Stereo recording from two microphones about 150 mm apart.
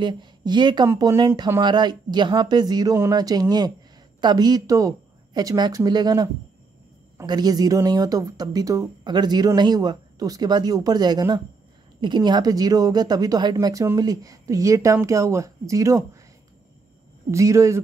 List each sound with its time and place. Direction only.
0.0 s speech: 30° right (ahead or behind)
17.3 s speech: 20° right (ahead or behind)